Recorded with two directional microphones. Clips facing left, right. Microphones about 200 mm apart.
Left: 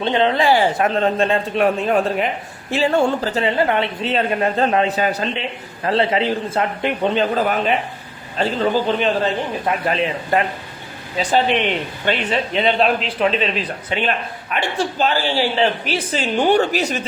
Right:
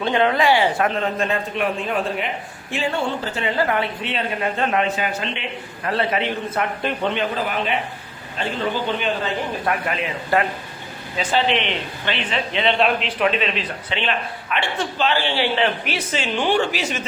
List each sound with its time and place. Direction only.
0.0 s a man's voice: 25° left (ahead or behind)
3.6 s a man's voice: 25° left (ahead or behind)
4.0 s a man's voice: 35° left (ahead or behind)
5.8 s a man's voice: 25° left (ahead or behind)
7.1 s a man's voice: 40° left (ahead or behind)
9.6 s a man's voice: 25° left (ahead or behind)
11.2 s a man's voice: 45° left (ahead or behind)
13.9 s a man's voice: 45° left (ahead or behind)